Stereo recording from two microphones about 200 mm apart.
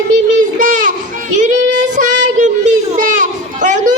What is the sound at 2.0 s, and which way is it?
Child singing, 40° right (ahead or behind).